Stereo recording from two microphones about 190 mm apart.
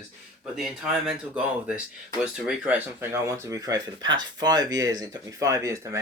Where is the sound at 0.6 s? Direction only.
Centre (ahead or behind).